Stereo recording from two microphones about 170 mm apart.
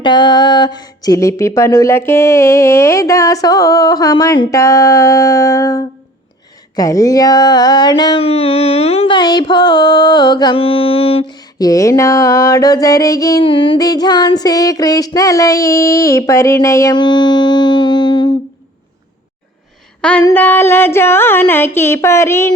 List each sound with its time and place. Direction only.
0.0 s speech: 25° left (ahead or behind)
11.3 s speech: 20° left (ahead or behind)
20.0 s a sound: 5° left (ahead or behind)
20.2 s speech: 10° left (ahead or behind)